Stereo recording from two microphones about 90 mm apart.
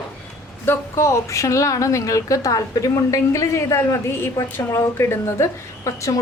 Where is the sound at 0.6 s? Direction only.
30° left (ahead or behind).